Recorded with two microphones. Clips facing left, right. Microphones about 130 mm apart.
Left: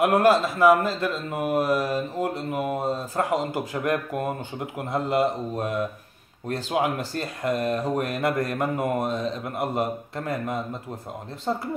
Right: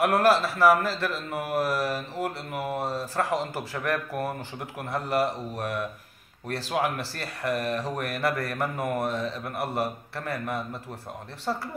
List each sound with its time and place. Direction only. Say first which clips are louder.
0.0 s a man's voice: left 3 dB; 15° left (ahead or behind)